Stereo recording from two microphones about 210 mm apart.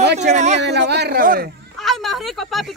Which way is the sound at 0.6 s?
55° right (ahead or behind).